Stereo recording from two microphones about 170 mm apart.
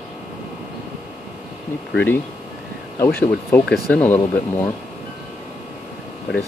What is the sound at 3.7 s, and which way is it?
Speech, 10° left (ahead or behind).